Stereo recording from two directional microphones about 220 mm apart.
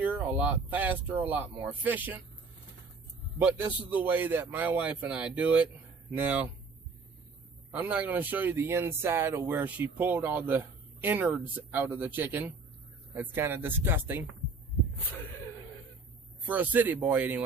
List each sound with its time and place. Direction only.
0.0 s speech: 5° right (ahead or behind)
3.4 s speech: 5° right (ahead or behind)
7.7 s speech: 5° right (ahead or behind)
16.5 s speech: 10° right (ahead or behind)